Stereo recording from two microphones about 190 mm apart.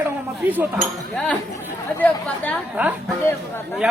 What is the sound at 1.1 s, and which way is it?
Speech, 5° left (ahead or behind).